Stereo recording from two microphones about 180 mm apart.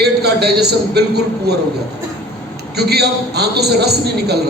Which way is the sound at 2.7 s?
65° right (ahead or behind).